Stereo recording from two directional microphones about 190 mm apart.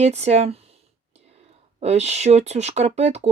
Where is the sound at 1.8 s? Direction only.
35° right (ahead or behind).